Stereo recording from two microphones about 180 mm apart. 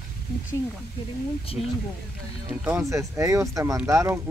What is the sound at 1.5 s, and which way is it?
Speech, 30° left (ahead or behind).